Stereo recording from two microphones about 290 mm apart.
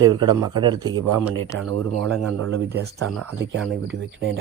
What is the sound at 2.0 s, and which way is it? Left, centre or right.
Speech, centre.